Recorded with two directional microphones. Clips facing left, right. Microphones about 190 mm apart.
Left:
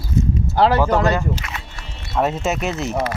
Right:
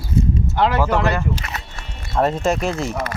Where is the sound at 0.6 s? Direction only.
35° left (ahead or behind).